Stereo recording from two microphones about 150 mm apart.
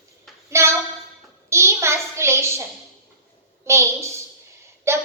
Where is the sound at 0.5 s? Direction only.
20° right (ahead or behind).